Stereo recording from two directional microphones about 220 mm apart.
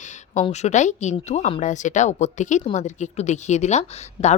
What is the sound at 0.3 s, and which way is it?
Speech, 30° left (ahead or behind).